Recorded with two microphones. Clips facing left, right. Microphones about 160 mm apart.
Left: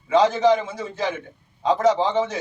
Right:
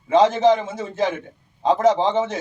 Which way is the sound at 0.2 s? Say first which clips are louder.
Right 2 dB; 25° right (ahead or behind).